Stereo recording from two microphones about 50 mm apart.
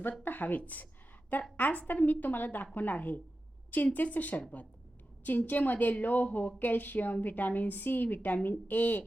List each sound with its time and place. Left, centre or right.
0.2 s a woman's voice: left